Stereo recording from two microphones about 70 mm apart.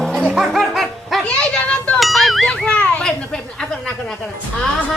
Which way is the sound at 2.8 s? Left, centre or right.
Centre.